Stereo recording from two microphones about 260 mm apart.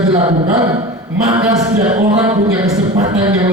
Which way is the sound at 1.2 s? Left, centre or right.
Centre.